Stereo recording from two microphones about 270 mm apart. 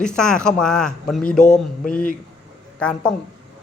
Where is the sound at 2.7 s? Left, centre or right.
Centre.